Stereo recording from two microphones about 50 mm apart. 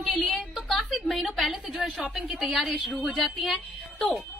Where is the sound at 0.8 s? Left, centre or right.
Centre.